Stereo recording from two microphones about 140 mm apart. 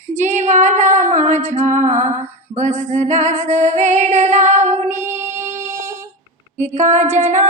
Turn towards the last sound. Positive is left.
turn(degrees=-15)  # may be behind; listen again after turning